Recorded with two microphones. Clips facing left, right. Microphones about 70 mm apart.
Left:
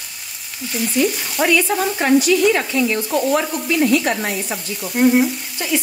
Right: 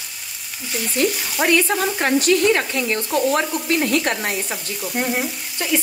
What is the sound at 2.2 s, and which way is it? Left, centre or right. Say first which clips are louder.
Stir: left 1 dB; right.